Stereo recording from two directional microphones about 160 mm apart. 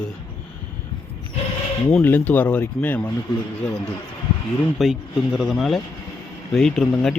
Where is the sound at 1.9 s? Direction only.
10° left (ahead or behind).